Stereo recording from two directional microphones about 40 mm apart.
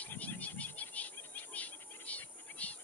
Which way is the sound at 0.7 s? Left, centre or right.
Left.